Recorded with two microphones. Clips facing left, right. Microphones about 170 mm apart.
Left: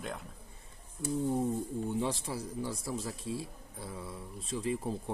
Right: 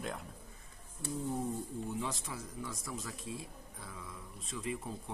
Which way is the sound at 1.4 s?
30° left (ahead or behind).